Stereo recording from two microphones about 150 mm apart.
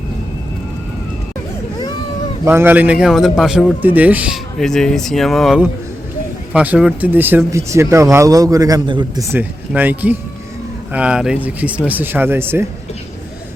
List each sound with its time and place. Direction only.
2.4 s speech: 15° right (ahead or behind)
4.6 s speech: 5° left (ahead or behind)
6.5 s speech: 10° right (ahead or behind)